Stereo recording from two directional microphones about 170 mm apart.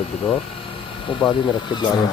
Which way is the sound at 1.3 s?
25° left (ahead or behind).